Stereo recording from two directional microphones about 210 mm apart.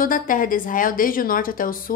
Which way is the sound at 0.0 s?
40° left (ahead or behind).